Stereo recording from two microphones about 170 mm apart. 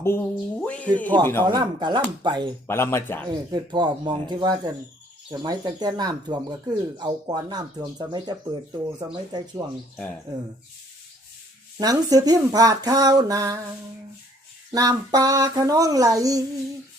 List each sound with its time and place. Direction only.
0.0 s speech: 15° left (ahead or behind)
1.5 s speech: 25° right (ahead or behind)
2.6 s speech: 15° left (ahead or behind)
3.5 s speech: 25° right (ahead or behind)
11.8 s speech: 20° right (ahead or behind)
14.7 s speech: 20° right (ahead or behind)